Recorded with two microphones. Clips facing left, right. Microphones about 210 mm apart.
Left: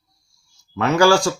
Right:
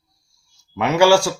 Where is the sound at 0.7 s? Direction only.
10° right (ahead or behind).